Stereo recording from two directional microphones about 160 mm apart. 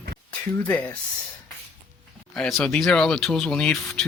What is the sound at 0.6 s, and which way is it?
Speech, 10° left (ahead or behind).